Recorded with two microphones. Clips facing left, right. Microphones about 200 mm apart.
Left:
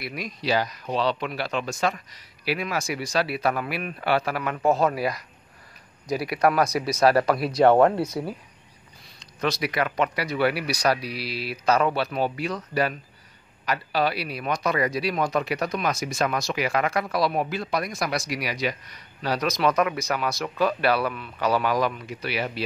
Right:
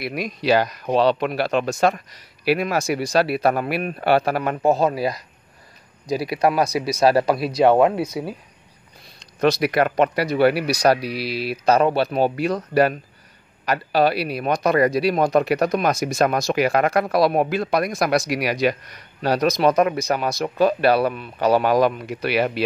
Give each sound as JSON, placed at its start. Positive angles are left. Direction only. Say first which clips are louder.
{"t": 0.0, "sound": "speech", "louder": "right 6 dB", "side_deg": -65}
{"t": 2.5, "sound": "speech", "louder": "right 7 dB", "side_deg": -40}
{"t": 4.6, "sound": "speech", "louder": "right 1 dB", "side_deg": -25}
{"t": 6.6, "sound": "speech", "louder": "right 2 dB", "side_deg": -10}
{"t": 7.0, "sound": "speech", "louder": "right 2 dB", "side_deg": -25}
{"t": 7.5, "sound": "speech", "louder": "right 1 dB", "side_deg": -10}
{"t": 9.4, "sound": "speech", "louder": "right 7 dB", "side_deg": -55}
{"t": 11.1, "sound": "speech", "louder": "right 6 dB", "side_deg": -70}
{"t": 11.6, "sound": "speech", "louder": "right 5 dB", "side_deg": -40}
{"t": 12.4, "sound": "a man's voice", "louder": "right 7 dB", "side_deg": -50}
{"t": 19.2, "sound": "speech", "louder": "right 6 dB", "side_deg": -45}
{"t": 21.8, "sound": "speech", "louder": "right 7 dB", "side_deg": -60}